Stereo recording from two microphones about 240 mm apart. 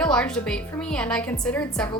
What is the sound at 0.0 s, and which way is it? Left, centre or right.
Speech, centre.